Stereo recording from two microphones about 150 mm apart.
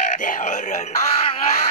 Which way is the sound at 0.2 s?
60° left (ahead or behind).